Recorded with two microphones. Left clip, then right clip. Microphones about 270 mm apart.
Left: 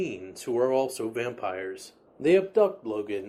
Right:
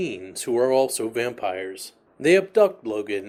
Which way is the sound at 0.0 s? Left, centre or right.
Right.